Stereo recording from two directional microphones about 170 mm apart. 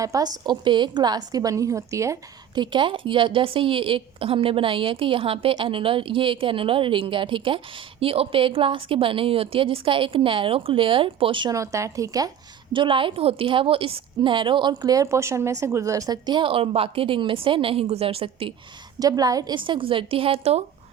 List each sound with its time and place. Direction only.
0.0 s a woman's voice: 20° right (ahead or behind)
2.6 s a woman's voice: 30° right (ahead or behind)
18.9 s a woman's voice: 20° right (ahead or behind)